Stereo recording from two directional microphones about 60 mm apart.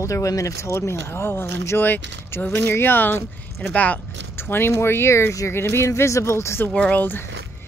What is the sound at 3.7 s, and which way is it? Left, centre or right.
Speech, left.